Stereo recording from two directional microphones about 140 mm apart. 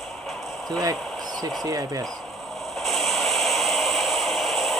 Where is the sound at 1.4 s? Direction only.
30° right (ahead or behind).